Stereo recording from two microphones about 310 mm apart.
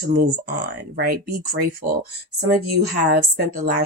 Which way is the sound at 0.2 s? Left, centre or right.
Right.